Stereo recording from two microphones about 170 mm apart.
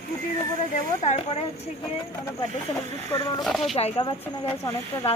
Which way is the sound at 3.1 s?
25° left (ahead or behind).